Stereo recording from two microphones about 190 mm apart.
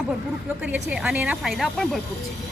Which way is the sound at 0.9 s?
5° right (ahead or behind).